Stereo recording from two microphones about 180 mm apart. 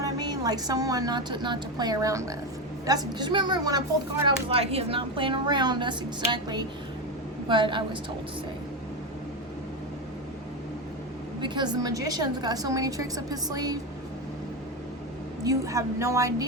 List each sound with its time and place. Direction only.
0.0 s a woman's voice: 20° right (ahead or behind)
11.3 s a woman's voice: 25° right (ahead or behind)
15.4 s a woman's voice: 15° right (ahead or behind)